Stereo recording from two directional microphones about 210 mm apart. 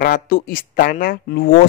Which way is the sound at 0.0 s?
40° left (ahead or behind).